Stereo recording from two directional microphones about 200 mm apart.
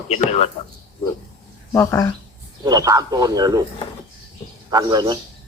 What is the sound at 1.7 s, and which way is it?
Speech, 15° left (ahead or behind).